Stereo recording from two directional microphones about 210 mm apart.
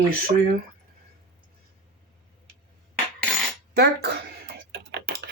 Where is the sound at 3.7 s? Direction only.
50° right (ahead or behind).